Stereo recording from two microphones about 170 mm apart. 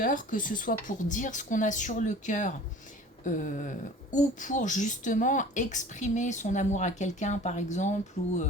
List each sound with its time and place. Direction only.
0.0 s speech: 50° left (ahead or behind)